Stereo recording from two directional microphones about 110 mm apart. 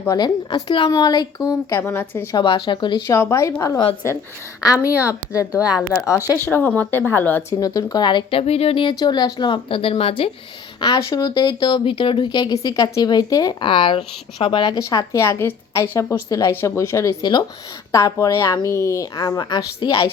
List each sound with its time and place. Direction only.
0.1 s a woman's voice: 40° left (ahead or behind)
1.7 s a woman's voice: 25° left (ahead or behind)
2.3 s speech: 45° left (ahead or behind)
3.1 s a woman's voice: 25° left (ahead or behind)
4.9 s a woman's voice: 15° right (ahead or behind)
6.4 s speech: 15° left (ahead or behind)
7.6 s speech: 35° left (ahead or behind); by 10.3 s 60° left (ahead or behind)
10.8 s speech: 40° left (ahead or behind)
12.6 s a woman's voice: 35° left (ahead or behind)
13.6 s speech: 50° left (ahead or behind)
14.8 s a woman's voice: 30° left (ahead or behind)